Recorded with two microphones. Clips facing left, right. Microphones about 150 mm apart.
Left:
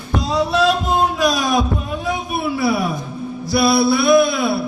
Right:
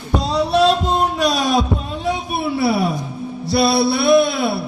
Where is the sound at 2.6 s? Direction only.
30° right (ahead or behind).